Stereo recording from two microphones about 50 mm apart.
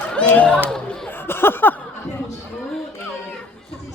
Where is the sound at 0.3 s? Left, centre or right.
Left.